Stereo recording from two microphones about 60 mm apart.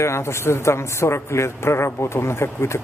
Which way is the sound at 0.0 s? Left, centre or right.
Left.